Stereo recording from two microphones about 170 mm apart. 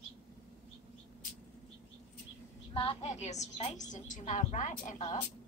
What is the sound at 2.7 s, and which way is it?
A woman's voice, 35° left (ahead or behind).